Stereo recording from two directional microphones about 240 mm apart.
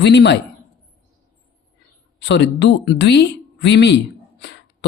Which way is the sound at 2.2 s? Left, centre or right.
Left.